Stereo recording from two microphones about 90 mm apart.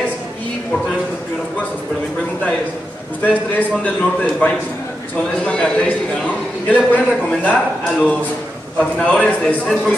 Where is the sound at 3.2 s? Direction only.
15° left (ahead or behind).